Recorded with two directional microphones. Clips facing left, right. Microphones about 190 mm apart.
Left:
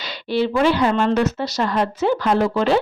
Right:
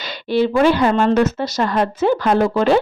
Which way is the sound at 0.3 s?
50° right (ahead or behind).